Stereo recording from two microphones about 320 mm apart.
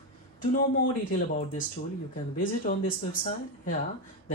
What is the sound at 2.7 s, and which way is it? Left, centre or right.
Speech, left.